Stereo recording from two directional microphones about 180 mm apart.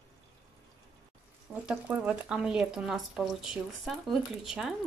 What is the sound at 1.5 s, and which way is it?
Speech, 5° right (ahead or behind).